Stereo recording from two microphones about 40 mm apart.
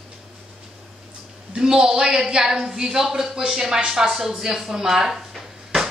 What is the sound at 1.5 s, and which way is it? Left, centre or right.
A woman's voice, centre.